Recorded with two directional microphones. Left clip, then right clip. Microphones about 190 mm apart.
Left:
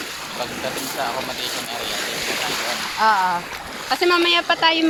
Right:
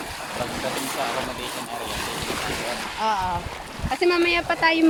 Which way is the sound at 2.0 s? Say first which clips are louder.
Left 4 dB; 40° right (ahead or behind).